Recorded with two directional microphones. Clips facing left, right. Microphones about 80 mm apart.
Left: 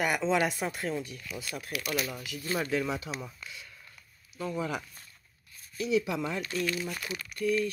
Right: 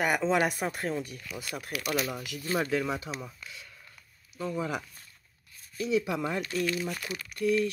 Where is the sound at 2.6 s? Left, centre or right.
Right.